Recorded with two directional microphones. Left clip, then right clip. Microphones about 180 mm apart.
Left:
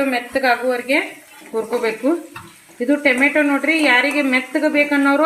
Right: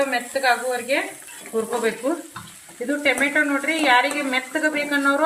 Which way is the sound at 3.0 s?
45° left (ahead or behind).